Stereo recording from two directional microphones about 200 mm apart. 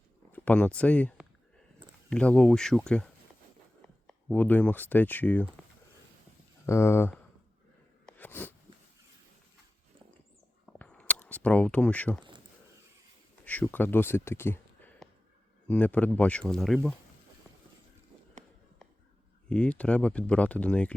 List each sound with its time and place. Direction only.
0.3 s speech: 10° left (ahead or behind)
6.7 s speech: 15° left (ahead or behind)
8.0 s a sound: 10° left (ahead or behind)
10.7 s camera: 5° left (ahead or behind)
13.4 s speech: 5° left (ahead or behind)
19.5 s speech: 5° left (ahead or behind)